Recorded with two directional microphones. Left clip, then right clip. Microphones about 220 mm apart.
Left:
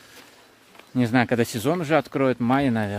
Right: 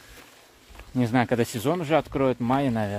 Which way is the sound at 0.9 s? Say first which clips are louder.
Left 2 dB; 15° left (ahead or behind).